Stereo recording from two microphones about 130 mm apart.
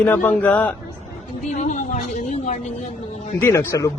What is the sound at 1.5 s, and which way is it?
A woman's voice, 70° left (ahead or behind).